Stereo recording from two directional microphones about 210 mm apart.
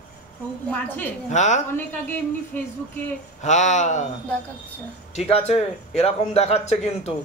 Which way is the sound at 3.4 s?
35° left (ahead or behind).